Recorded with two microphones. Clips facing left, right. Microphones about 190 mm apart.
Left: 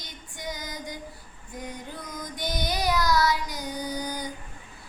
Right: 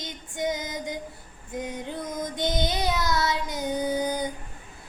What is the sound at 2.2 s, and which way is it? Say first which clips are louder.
Child singing: right 4 dB; 25° right (ahead or behind).